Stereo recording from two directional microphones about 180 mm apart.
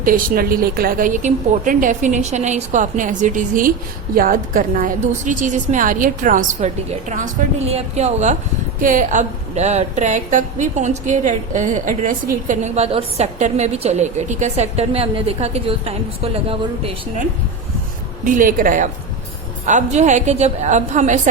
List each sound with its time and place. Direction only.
0.0 s a woman's voice: 50° right (ahead or behind); by 17.2 s 35° right (ahead or behind)
18.3 s a woman's voice: 50° right (ahead or behind)